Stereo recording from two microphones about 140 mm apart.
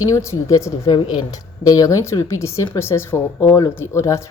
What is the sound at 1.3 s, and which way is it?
Speech, 25° left (ahead or behind).